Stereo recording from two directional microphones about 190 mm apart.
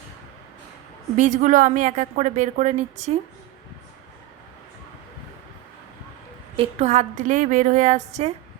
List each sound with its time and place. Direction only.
1.1 s a woman's voice: 40° right (ahead or behind)
6.6 s a woman's voice: 35° right (ahead or behind)